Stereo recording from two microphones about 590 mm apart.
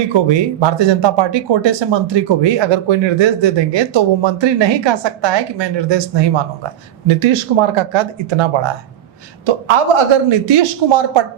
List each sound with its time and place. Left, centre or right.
0.3 s speech: right